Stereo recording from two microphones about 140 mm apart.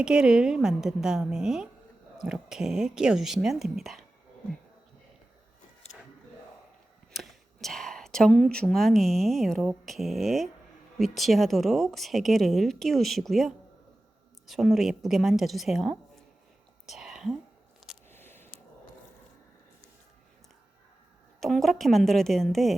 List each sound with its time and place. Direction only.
0.0 s speech: 5° right (ahead or behind)
7.1 s speech: centre (ahead or behind)
16.8 s whispering: 5° right (ahead or behind)
18.1 s a sound: 15° left (ahead or behind)
21.4 s speech: centre (ahead or behind)